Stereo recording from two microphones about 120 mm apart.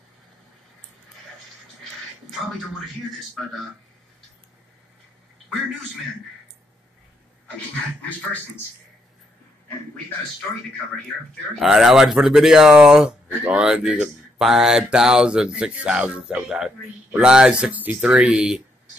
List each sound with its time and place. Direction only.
11.6 s speech: centre (ahead or behind)